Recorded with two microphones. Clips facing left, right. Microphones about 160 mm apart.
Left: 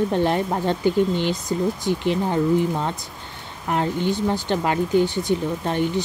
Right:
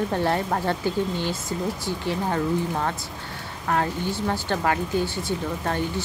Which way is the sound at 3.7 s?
20° left (ahead or behind).